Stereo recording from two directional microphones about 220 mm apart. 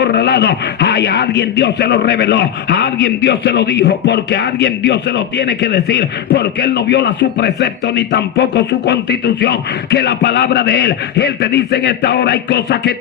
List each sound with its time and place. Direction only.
0.0 s speech: 50° left (ahead or behind)